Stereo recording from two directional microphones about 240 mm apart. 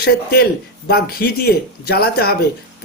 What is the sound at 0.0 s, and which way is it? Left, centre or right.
A man's voice, left.